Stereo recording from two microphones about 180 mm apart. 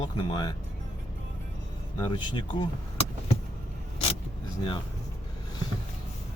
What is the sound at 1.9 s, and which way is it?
Speech, 25° left (ahead or behind).